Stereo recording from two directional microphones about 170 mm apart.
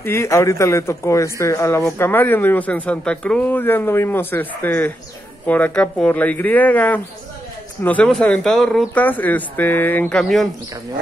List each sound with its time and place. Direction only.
0.0 s a man's voice: 15° left (ahead or behind)